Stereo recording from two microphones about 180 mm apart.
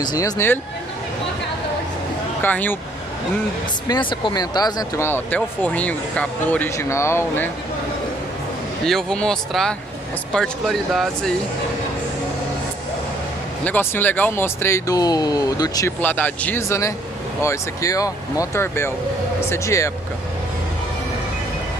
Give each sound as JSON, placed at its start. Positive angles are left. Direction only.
{"t": 0.0, "sound": "speech", "side_deg": 20}
{"t": 2.4, "sound": "speech", "side_deg": 10}
{"t": 3.8, "sound": "speech", "side_deg": 25}
{"t": 8.8, "sound": "speech", "side_deg": 5}
{"t": 13.7, "sound": "speech", "side_deg": 10}
{"t": 16.0, "sound": "speech", "side_deg": 10}